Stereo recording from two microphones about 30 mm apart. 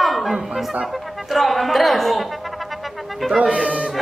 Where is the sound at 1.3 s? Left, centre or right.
Centre.